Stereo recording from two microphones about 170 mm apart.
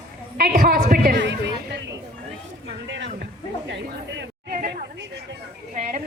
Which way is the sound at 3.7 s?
90° right.